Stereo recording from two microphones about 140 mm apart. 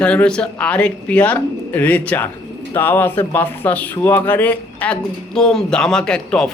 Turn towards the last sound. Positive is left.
turn(degrees=5)  # may be behind; listen again after turning